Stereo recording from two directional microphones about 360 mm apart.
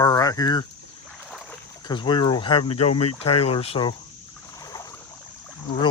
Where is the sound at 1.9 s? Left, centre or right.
Centre.